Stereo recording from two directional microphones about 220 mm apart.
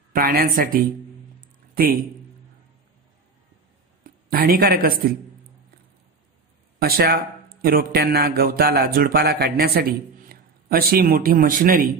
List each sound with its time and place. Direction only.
0.1 s speech: 40° right (ahead or behind)
1.4 s a sound: 40° right (ahead or behind)
4.0 s speech: 40° right (ahead or behind)
6.8 s a man's voice: 45° right (ahead or behind)